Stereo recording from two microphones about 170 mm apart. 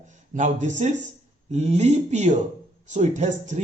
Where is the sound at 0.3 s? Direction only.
45° right (ahead or behind).